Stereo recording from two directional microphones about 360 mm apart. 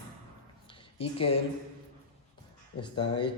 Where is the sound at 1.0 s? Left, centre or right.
Centre.